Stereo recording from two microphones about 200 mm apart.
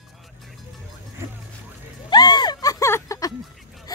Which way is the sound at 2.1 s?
20° left (ahead or behind).